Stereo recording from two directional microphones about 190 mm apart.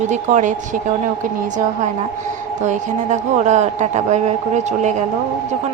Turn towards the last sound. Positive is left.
turn(degrees=-40)  # may be behind; listen again after turning